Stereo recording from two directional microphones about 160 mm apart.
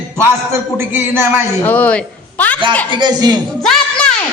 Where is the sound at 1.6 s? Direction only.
10° left (ahead or behind).